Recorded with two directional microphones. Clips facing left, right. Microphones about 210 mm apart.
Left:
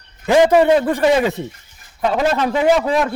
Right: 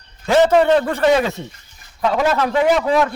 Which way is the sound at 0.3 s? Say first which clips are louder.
Left 1 dB; 15° left (ahead or behind).